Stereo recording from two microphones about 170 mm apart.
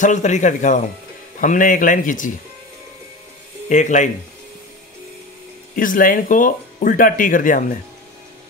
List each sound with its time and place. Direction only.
0.0 s speech: 45° left (ahead or behind)
3.6 s speech: 45° left (ahead or behind)
5.8 s speech: 55° left (ahead or behind)